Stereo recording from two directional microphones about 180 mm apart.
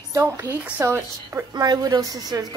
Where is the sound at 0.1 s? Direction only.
15° right (ahead or behind).